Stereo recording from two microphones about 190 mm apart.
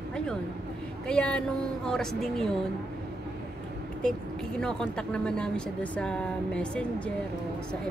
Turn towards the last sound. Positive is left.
turn(degrees=5)  # may be behind; listen again after turning